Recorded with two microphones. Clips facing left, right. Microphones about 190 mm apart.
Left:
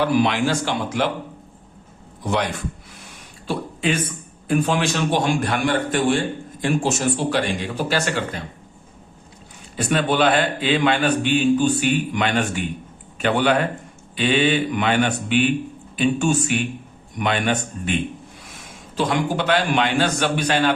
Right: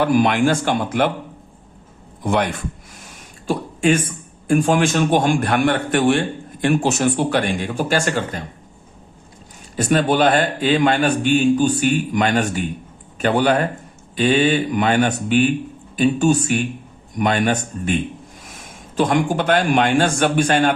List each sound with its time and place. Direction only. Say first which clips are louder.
0.0 s speech: right 3 dB; 50° right (ahead or behind)
2.2 s speech: right 3 dB; 50° right (ahead or behind)
9.7 s speech: right 3 dB; 40° right (ahead or behind)